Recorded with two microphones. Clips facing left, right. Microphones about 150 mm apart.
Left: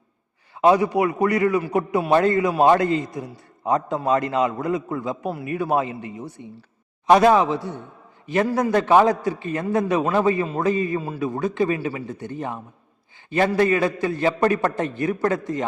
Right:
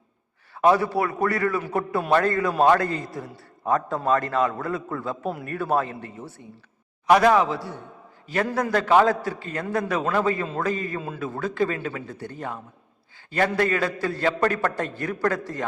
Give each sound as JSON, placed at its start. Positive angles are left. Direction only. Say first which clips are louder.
{"t": 0.6, "sound": "a man's voice", "louder": "left 3 dB", "side_deg": 15}
{"t": 13.6, "sound": "a man's voice", "louder": "left 4 dB", "side_deg": 20}